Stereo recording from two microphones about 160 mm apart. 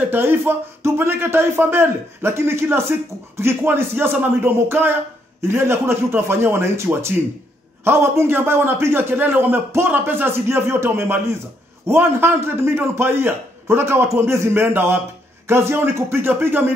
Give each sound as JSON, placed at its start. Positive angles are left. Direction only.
{"t": 0.1, "sound": "speech", "side_deg": -15}